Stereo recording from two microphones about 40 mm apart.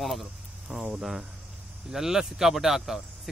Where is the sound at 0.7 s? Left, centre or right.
Right.